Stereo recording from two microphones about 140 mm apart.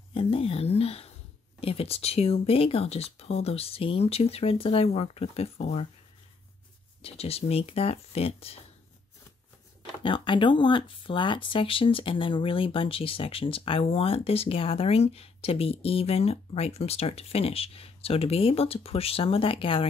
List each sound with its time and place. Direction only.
0.1 s a sound: 40° left (ahead or behind)
1.6 s speech: 45° left (ahead or behind)
7.0 s speech: 45° left (ahead or behind)
10.0 s speech: 35° left (ahead or behind)